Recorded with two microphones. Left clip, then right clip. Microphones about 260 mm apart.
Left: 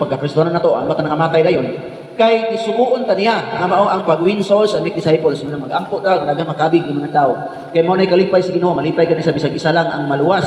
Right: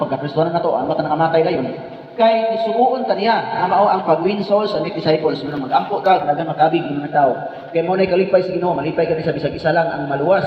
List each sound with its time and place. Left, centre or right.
0.1 s a man's voice: left